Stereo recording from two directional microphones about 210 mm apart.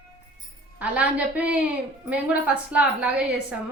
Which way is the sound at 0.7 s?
5° right (ahead or behind).